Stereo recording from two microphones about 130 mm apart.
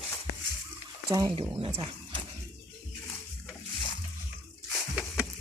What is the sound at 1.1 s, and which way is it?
Speech, 35° right (ahead or behind).